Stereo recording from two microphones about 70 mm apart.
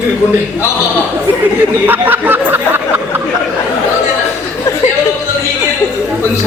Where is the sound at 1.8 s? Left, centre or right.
Right.